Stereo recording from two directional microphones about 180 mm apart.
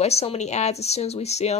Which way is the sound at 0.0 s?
35° left (ahead or behind).